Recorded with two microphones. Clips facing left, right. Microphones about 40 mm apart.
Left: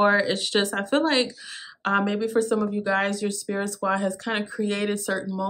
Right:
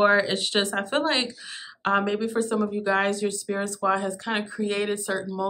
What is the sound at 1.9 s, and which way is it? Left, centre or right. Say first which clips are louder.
Speech: even; centre.